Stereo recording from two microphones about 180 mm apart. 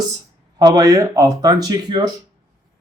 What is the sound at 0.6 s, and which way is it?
Speech, 20° right (ahead or behind).